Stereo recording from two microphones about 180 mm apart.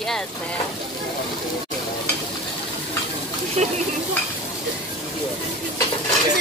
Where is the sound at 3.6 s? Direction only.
40° right (ahead or behind).